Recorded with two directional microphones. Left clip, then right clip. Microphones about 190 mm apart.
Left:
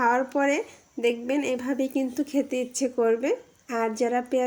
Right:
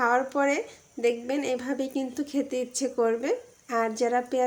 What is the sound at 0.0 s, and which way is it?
A woman's voice, 10° left (ahead or behind).